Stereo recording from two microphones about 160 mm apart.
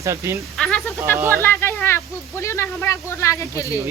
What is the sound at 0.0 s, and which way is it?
Speech, 20° right (ahead or behind).